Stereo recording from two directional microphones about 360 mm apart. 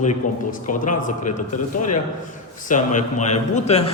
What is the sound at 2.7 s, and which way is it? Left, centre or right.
Speech, left.